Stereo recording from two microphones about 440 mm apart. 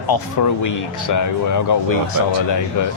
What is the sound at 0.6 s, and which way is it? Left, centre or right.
A man's voice, left.